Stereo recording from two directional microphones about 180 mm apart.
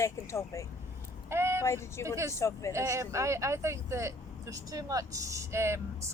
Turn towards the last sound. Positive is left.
turn(degrees=-15)  # may be behind; listen again after turning